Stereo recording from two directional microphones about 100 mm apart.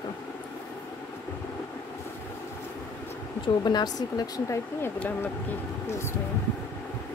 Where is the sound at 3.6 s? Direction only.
45° left (ahead or behind).